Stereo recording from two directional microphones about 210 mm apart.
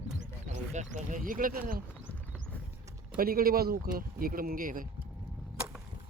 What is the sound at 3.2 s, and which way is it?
Speech, 45° right (ahead or behind).